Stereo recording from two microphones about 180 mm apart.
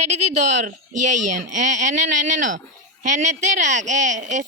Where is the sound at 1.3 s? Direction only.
45° right (ahead or behind).